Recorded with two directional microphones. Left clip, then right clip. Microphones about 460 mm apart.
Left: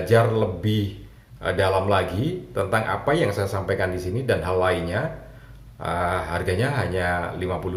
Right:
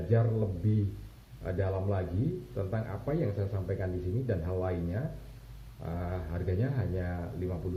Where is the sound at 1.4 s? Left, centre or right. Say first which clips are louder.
Left 13 dB; centre.